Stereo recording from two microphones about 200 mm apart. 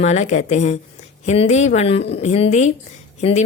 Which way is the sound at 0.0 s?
35° left (ahead or behind).